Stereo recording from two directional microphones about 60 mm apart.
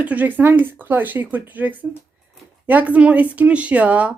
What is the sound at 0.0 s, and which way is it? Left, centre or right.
Speech, right.